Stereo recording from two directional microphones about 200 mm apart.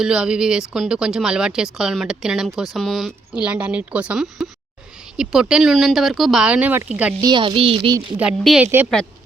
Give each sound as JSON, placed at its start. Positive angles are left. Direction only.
{"t": 0.0, "sound": "speech", "side_deg": -5}
{"t": 7.2, "sound": "a sound", "side_deg": -20}
{"t": 8.2, "sound": "speech", "side_deg": -5}